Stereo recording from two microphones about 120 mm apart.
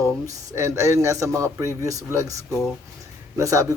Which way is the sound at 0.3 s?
25° right (ahead or behind).